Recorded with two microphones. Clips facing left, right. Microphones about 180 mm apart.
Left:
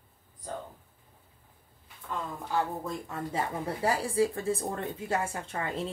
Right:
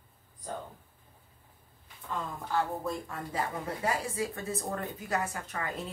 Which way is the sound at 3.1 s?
25° left (ahead or behind).